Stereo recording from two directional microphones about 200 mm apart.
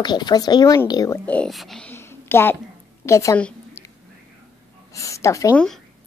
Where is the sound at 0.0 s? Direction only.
20° left (ahead or behind).